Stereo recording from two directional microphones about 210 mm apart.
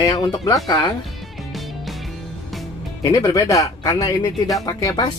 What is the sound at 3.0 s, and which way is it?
Speech, 15° left (ahead or behind).